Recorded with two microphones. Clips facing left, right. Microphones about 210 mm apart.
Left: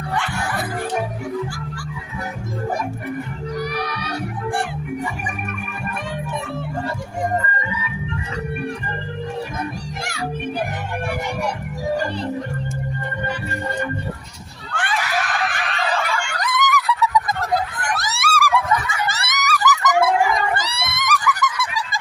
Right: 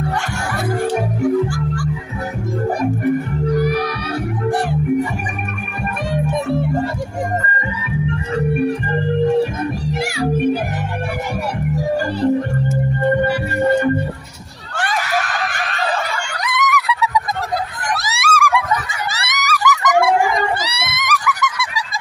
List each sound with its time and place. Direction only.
10.0 s music: 10° right (ahead or behind)
14.7 s screaming: 40° right (ahead or behind)
16.3 s a sound: centre (ahead or behind)
20.5 s screaming: centre (ahead or behind)